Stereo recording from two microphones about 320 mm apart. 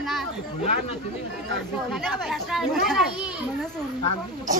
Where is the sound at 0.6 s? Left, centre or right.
Centre.